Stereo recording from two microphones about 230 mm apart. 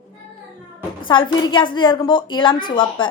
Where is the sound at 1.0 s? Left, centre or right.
Left.